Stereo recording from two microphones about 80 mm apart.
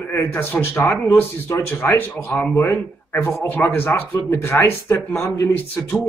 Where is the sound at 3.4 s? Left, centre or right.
Left.